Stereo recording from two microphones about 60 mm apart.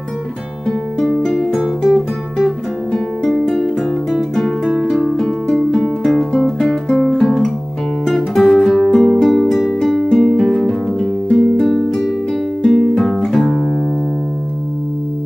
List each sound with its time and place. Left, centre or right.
0.7 s music: centre
8.6 s music: centre